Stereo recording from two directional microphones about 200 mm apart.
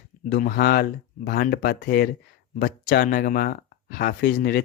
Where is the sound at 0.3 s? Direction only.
45° left (ahead or behind).